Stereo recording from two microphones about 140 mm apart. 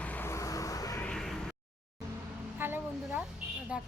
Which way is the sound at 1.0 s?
5° left (ahead or behind).